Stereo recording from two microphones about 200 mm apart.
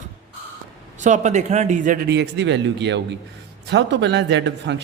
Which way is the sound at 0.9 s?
35° right (ahead or behind).